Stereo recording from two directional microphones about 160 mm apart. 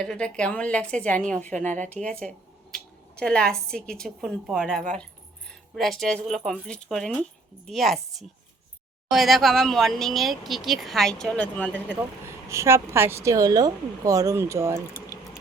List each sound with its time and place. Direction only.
0.0 s a woman's voice: 5° left (ahead or behind)
12.5 s speech: 15° right (ahead or behind)